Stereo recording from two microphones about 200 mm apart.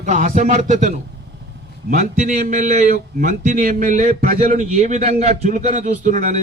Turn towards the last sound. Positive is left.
turn(degrees=-40)  # may be behind; listen again after turning